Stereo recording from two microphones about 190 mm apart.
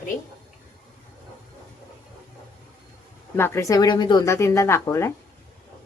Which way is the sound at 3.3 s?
15° left (ahead or behind).